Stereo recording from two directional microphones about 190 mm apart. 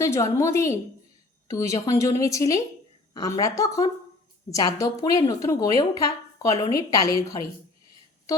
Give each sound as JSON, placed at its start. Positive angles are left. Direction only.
{"t": 0.0, "sound": "a woman's voice", "side_deg": 15}